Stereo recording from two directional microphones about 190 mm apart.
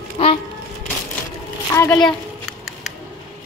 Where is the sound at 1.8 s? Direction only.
5° left (ahead or behind).